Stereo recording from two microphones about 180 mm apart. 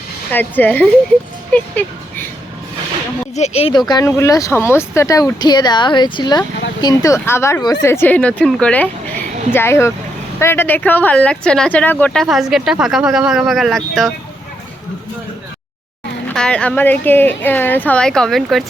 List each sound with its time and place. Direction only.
0.3 s speech: 10° left (ahead or behind)
3.3 s speech: 35° left (ahead or behind); by 14.1 s centre (ahead or behind)
16.3 s speech: 5° left (ahead or behind)